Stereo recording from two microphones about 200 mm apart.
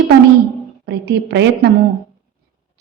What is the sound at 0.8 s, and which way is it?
Speech, 55° right (ahead or behind).